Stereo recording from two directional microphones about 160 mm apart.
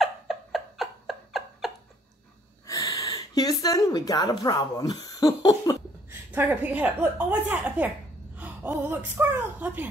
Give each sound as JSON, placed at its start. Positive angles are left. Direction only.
{"t": 0.0, "sound": "a sound", "side_deg": 0}
{"t": 2.6, "sound": "speech", "side_deg": 20}
{"t": 6.0, "sound": "a woman's voice", "side_deg": -15}